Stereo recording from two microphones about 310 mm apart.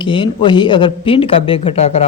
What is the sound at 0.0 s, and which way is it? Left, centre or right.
Speech, centre.